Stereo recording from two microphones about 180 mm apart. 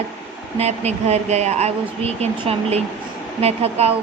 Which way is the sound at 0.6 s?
35° right (ahead or behind).